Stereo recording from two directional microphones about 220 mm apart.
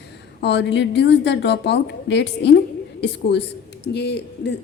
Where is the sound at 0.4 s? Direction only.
50° left (ahead or behind).